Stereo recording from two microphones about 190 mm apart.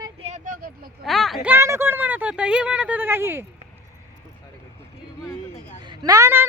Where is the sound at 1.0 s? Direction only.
Centre (ahead or behind).